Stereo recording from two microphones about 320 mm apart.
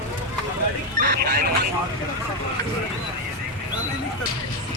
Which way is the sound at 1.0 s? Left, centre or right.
Right.